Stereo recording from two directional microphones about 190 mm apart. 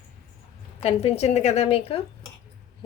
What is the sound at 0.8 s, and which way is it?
A woman's voice, 35° left (ahead or behind).